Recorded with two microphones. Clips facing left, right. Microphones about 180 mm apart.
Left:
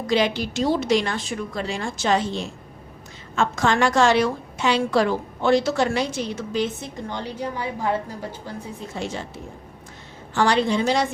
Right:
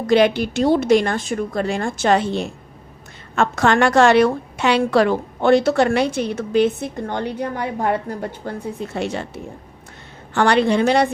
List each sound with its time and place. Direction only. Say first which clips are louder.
0.1 s a woman's voice: right 6 dB; 55° right (ahead or behind)